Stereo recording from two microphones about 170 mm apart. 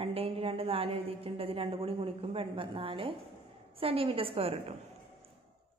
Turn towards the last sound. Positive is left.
turn(degrees=-35)  # may be behind; listen again after turning